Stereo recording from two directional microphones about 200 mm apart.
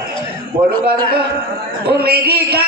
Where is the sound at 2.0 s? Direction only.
50° right (ahead or behind).